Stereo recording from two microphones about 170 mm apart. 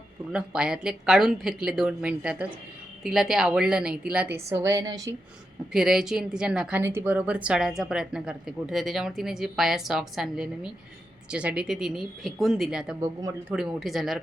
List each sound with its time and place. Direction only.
0.3 s a woman's voice: 5° right (ahead or behind); by 5.1 s 20° right (ahead or behind)
5.7 s a woman's voice: 5° right (ahead or behind)